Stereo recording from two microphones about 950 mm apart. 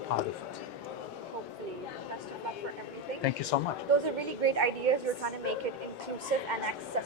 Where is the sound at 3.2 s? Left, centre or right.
Left.